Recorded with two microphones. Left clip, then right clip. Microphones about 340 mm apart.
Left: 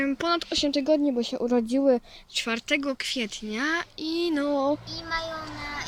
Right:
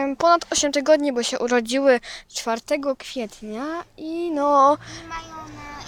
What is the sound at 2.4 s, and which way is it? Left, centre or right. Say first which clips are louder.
Speech: right 3 dB; centre.